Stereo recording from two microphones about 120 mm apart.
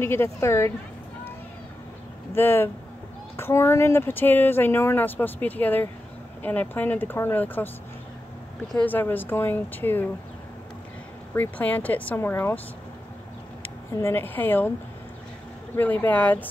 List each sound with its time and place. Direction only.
0.0 s a woman's voice: 20° left (ahead or behind)
2.3 s a woman's voice: 20° left (ahead or behind)
8.7 s speech: 15° left (ahead or behind)
11.3 s speech: 15° left (ahead or behind)
13.6 s speech: 15° left (ahead or behind)
15.7 s speech: 20° left (ahead or behind)